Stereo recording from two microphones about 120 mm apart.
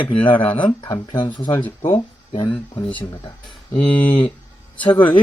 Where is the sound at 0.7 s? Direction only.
35° left (ahead or behind).